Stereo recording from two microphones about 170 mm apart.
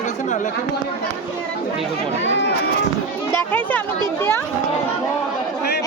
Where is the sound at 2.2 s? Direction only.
90° left.